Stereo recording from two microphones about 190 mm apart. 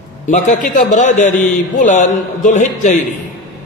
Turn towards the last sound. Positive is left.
turn(degrees=40)  # may be behind; listen again after turning